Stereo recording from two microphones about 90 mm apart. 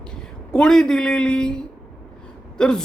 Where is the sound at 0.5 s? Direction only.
5° left (ahead or behind).